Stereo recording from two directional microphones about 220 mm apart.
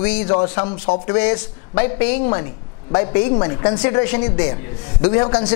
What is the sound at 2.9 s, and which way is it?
A man's voice, 20° left (ahead or behind).